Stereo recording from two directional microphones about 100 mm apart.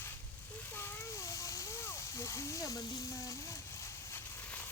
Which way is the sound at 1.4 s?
30° left (ahead or behind).